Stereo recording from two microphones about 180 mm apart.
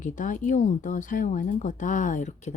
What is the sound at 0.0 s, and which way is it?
Speech, 45° left (ahead or behind).